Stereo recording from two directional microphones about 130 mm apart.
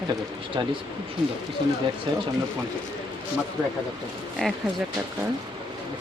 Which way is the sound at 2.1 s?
35° right (ahead or behind).